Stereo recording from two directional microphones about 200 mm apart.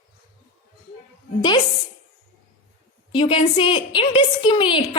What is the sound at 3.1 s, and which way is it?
A woman's voice, 25° left (ahead or behind).